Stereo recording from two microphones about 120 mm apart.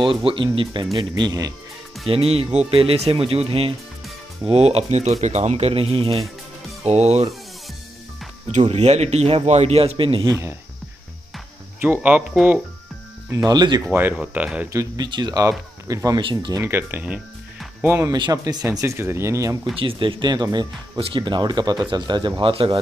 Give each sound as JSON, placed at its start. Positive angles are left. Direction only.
{"t": 0.0, "sound": "speech", "side_deg": -45}
{"t": 2.0, "sound": "speech", "side_deg": -50}
{"t": 6.8, "sound": "speech", "side_deg": -65}
{"t": 8.7, "sound": "speech", "side_deg": -65}
{"t": 11.8, "sound": "speech", "side_deg": -10}
{"t": 13.3, "sound": "speech", "side_deg": -30}
{"t": 14.1, "sound": "speech", "side_deg": -10}
{"t": 14.7, "sound": "speech", "side_deg": -30}
{"t": 16.2, "sound": "speech", "side_deg": -45}
{"t": 16.5, "sound": "speech", "side_deg": -20}
{"t": 18.1, "sound": "speech", "side_deg": -35}
{"t": 19.8, "sound": "speech", "side_deg": -45}
{"t": 22.4, "sound": "speech", "side_deg": -50}